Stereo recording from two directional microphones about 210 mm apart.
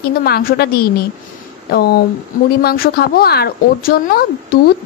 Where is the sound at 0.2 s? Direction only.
45° left (ahead or behind).